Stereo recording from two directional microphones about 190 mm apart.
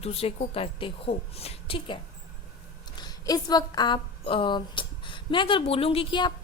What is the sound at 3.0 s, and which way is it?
A woman's voice, 20° left (ahead or behind).